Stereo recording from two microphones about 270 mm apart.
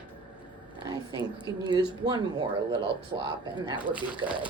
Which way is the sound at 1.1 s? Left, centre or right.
Centre.